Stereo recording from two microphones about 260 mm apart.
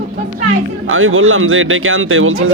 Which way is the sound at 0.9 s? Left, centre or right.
Right.